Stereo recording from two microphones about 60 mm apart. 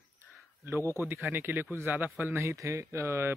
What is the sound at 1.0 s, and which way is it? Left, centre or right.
Speech, right.